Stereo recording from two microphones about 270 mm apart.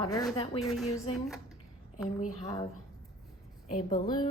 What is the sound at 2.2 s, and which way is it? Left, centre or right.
Speech, left.